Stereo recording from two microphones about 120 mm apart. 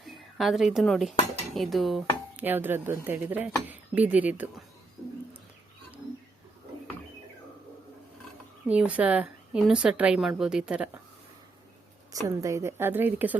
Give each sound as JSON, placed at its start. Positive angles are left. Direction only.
{"t": 0.0, "sound": "speech", "side_deg": 0}
{"t": 2.3, "sound": "a woman's voice", "side_deg": -15}
{"t": 8.6, "sound": "a woman's voice", "side_deg": -10}
{"t": 12.1, "sound": "a woman's voice", "side_deg": -25}